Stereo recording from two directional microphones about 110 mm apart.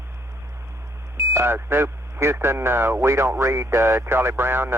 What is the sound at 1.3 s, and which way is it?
Speech, 20° right (ahead or behind).